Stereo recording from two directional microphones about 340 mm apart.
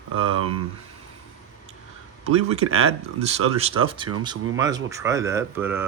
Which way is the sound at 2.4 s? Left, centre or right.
Centre.